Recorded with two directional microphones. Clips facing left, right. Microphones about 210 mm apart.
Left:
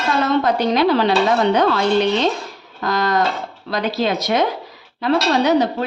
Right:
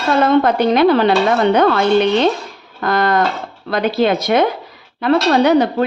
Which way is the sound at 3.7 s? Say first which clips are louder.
Right 5 dB; 55° right (ahead or behind).